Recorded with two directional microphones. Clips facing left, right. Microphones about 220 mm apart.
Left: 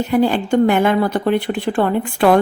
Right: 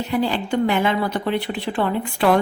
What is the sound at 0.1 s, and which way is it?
Speech, 50° left (ahead or behind).